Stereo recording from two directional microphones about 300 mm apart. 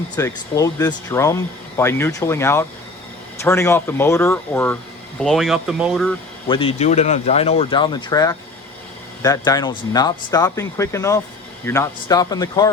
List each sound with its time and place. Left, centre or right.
0.2 s speech: centre
6.5 s speech: centre